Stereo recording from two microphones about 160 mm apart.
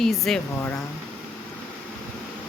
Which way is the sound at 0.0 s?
5° left (ahead or behind).